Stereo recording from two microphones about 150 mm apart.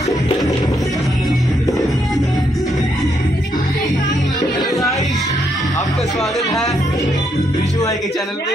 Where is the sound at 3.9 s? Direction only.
55° left (ahead or behind).